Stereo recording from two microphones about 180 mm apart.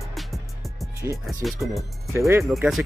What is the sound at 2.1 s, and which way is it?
Speech, 15° right (ahead or behind).